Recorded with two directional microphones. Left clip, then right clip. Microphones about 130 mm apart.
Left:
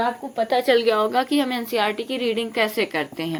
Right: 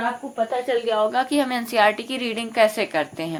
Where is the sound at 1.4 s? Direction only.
10° left (ahead or behind).